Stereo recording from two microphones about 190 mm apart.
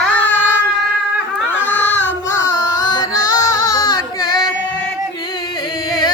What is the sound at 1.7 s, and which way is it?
Music, 10° left (ahead or behind).